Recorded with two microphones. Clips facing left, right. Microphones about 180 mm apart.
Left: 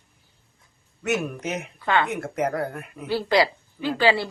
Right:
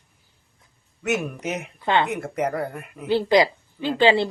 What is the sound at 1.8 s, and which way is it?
Speech, 20° right (ahead or behind).